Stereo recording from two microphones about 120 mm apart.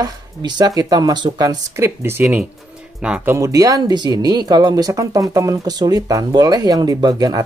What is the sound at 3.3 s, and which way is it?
Speech, 30° right (ahead or behind).